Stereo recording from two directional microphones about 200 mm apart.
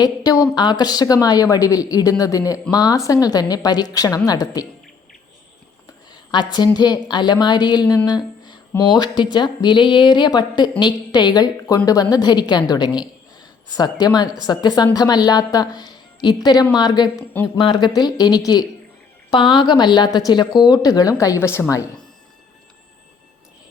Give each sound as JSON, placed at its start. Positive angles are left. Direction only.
{"t": 0.0, "sound": "a woman's voice", "side_deg": 20}
{"t": 6.3, "sound": "a woman's voice", "side_deg": 20}